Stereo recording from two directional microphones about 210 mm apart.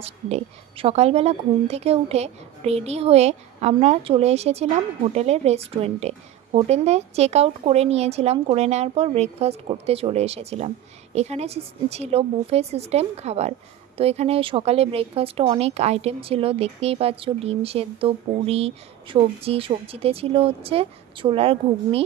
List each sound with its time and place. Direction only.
0.0 s speech: 30° right (ahead or behind)